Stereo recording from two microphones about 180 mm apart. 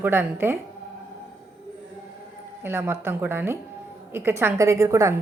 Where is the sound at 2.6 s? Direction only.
10° right (ahead or behind).